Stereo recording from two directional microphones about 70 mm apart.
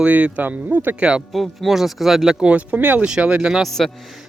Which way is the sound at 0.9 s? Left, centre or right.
Centre.